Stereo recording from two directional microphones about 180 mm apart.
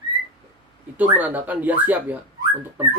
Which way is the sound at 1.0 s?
10° right (ahead or behind).